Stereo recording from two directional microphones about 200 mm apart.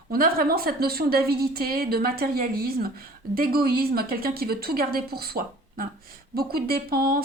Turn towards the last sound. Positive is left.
turn(degrees=-50)  # may be behind; listen again after turning